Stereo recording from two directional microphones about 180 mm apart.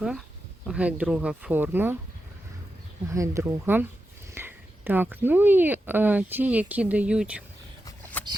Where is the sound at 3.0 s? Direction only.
15° right (ahead or behind).